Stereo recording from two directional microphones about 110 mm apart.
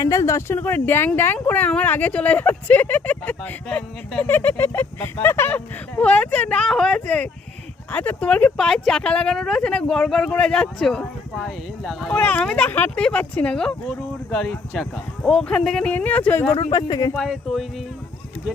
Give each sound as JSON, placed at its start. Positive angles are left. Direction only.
{"t": 0.0, "sound": "speech", "side_deg": 30}
{"t": 12.0, "sound": "speech", "side_deg": 10}
{"t": 16.7, "sound": "speech", "side_deg": 35}
{"t": 17.2, "sound": "speech", "side_deg": 0}